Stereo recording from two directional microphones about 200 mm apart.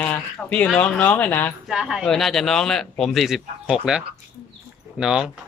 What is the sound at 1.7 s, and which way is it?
Speech, centre (ahead or behind).